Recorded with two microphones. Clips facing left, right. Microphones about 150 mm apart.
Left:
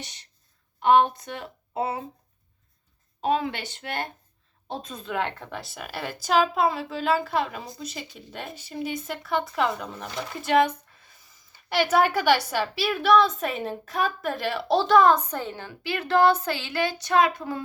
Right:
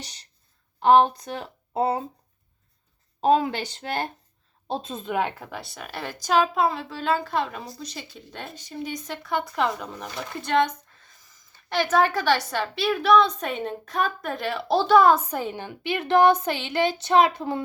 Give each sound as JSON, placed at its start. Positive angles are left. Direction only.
{"t": 0.0, "sound": "a woman's voice", "side_deg": -35}
{"t": 3.2, "sound": "speech", "side_deg": -35}
{"t": 5.5, "sound": "a woman's voice", "side_deg": 0}
{"t": 11.7, "sound": "a woman's voice", "side_deg": 10}